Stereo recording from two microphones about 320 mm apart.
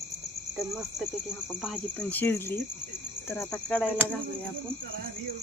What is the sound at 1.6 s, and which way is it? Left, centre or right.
Cricket, centre.